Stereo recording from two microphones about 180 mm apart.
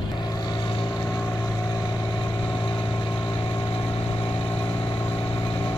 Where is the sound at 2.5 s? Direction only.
25° left (ahead or behind).